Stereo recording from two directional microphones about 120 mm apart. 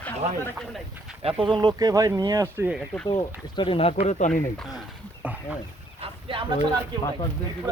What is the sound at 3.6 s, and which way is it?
Speech, 50° left (ahead or behind).